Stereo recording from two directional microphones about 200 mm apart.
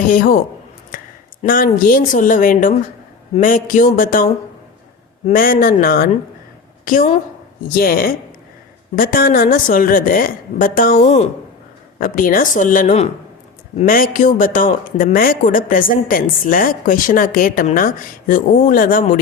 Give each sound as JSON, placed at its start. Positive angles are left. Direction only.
{"t": 0.1, "sound": "a man's voice", "side_deg": 45}
{"t": 1.4, "sound": "a man's voice", "side_deg": 45}
{"t": 11.9, "sound": "a man's voice", "side_deg": 45}